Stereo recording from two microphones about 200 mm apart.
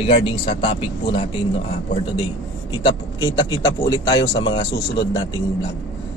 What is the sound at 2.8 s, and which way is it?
Speech, 20° left (ahead or behind).